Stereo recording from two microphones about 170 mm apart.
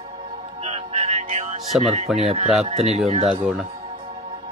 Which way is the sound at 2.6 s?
40° right (ahead or behind).